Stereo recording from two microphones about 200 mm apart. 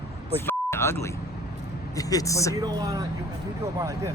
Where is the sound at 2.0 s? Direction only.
15° left (ahead or behind).